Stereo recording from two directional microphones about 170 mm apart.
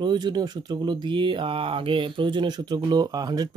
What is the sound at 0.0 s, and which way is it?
Speech, 25° right (ahead or behind).